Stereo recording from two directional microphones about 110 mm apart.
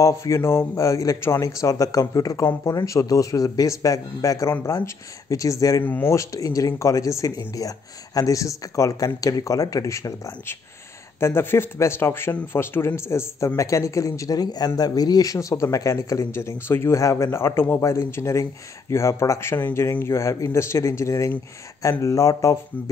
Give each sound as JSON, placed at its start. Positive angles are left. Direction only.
{"t": 0.0, "sound": "speech", "side_deg": 25}